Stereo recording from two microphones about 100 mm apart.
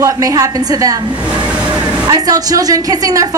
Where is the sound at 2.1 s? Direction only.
40° right (ahead or behind).